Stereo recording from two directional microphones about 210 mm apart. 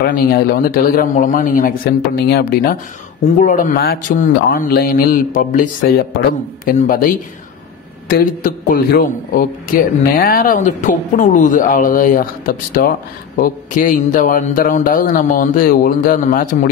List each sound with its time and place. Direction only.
0.0 s a man's voice: 45° left (ahead or behind)